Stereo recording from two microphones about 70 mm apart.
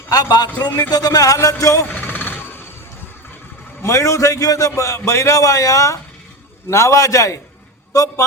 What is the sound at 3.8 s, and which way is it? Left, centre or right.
A man's voice, left.